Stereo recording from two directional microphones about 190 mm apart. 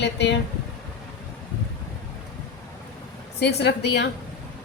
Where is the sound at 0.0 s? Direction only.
65° left (ahead or behind).